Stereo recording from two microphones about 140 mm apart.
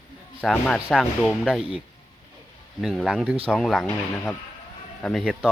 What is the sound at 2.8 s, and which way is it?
Speech, centre (ahead or behind).